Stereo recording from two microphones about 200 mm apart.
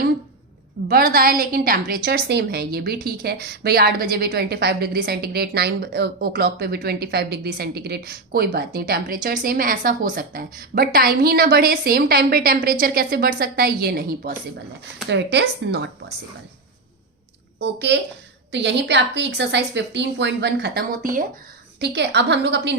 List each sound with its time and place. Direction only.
0.9 s a woman's voice: 50° right (ahead or behind)
15.1 s a woman's voice: 60° right (ahead or behind)
17.6 s a woman's voice: 60° right (ahead or behind); by 21.2 s 45° right (ahead or behind)
21.8 s a woman's voice: 55° right (ahead or behind)